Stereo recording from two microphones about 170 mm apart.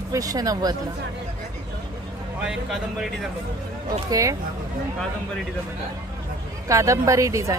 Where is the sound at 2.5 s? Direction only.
Centre (ahead or behind).